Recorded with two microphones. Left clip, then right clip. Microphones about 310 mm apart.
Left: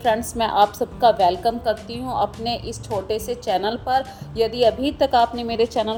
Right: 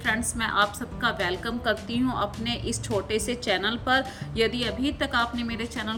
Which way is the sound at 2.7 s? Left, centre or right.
Centre.